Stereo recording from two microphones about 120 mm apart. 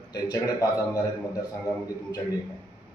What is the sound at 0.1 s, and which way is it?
Speech, 30° left (ahead or behind).